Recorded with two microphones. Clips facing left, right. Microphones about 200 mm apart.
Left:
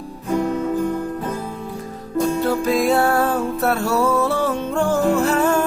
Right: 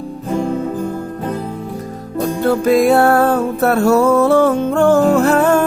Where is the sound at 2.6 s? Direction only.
60° right (ahead or behind).